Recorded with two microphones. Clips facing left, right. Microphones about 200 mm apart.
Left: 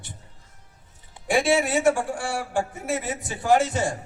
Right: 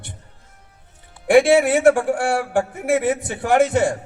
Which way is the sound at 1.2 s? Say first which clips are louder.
Right 8 dB; 65° right (ahead or behind).